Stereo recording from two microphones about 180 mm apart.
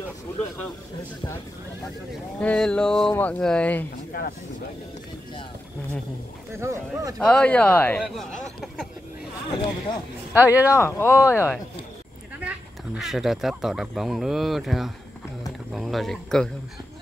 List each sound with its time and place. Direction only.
2.4 s speech: 5° left (ahead or behind)
6.5 s speech: 15° right (ahead or behind)
7.2 s speech: 5° left (ahead or behind)
10.3 s speech: 10° right (ahead or behind)
10.7 s speech: 15° left (ahead or behind)
12.4 s speech: 5° right (ahead or behind)